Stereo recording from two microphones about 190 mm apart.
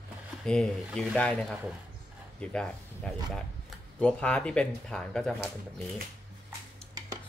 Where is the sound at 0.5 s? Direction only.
5° left (ahead or behind).